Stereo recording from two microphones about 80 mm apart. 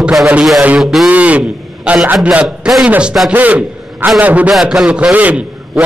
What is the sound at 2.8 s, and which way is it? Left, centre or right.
A man's voice, centre.